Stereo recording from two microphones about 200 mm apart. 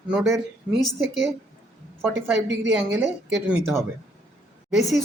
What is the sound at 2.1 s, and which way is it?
Speech, 60° right (ahead or behind).